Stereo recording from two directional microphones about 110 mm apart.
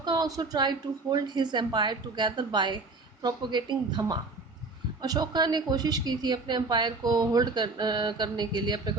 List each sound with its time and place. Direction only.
0.0 s a woman's voice: 40° right (ahead or behind)